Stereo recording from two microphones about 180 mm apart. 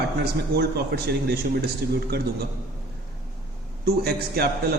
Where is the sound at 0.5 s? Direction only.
65° right (ahead or behind).